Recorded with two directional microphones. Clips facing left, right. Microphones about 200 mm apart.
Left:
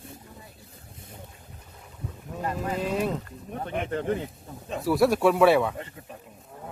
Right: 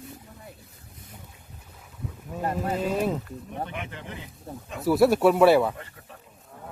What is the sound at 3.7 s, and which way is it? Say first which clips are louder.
Speech: left 10 dB; 45° left (ahead or behind).